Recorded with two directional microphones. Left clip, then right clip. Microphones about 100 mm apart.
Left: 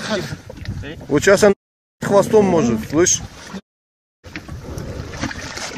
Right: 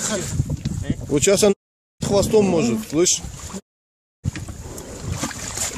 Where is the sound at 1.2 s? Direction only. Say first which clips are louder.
Left 4 dB; 35° right (ahead or behind).